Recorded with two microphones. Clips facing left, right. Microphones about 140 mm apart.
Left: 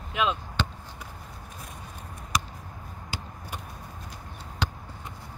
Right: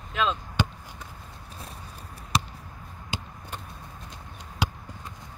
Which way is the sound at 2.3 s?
30° right (ahead or behind).